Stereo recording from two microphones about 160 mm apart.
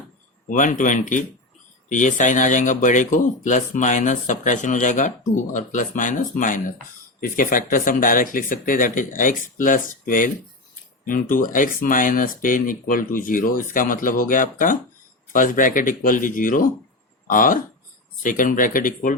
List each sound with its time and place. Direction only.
0.4 s speech: 50° left (ahead or behind)